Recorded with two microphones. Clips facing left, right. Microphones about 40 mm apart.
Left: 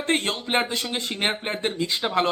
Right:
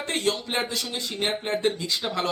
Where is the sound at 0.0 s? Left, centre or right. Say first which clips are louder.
Left 2 dB; left.